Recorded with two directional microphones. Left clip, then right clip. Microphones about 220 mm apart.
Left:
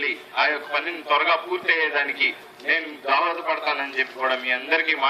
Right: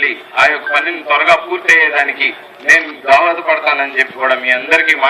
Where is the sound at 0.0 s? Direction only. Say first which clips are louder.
Right 11 dB; 25° right (ahead or behind).